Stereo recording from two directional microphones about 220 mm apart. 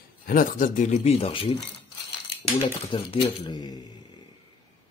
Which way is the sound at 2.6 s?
25° left (ahead or behind).